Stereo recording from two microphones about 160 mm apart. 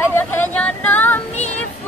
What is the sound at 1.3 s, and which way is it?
Music, 45° left (ahead or behind).